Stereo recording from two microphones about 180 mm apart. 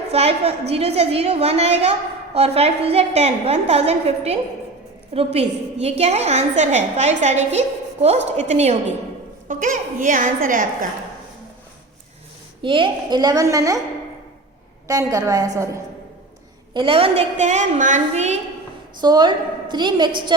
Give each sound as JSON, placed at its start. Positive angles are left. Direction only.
{"t": 0.1, "sound": "a woman's voice", "side_deg": -35}
{"t": 12.6, "sound": "a woman's voice", "side_deg": -25}
{"t": 14.8, "sound": "a woman's voice", "side_deg": -20}
{"t": 16.7, "sound": "a woman's voice", "side_deg": -30}
{"t": 19.0, "sound": "a woman's voice", "side_deg": -25}